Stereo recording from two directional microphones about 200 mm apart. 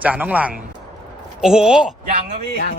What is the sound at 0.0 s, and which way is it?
A man's voice, 5° right (ahead or behind).